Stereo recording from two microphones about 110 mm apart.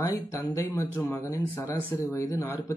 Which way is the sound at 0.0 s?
30° left (ahead or behind).